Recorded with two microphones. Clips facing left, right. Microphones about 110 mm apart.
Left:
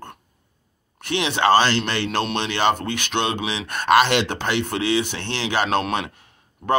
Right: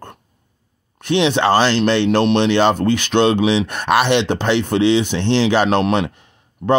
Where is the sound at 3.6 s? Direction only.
20° right (ahead or behind).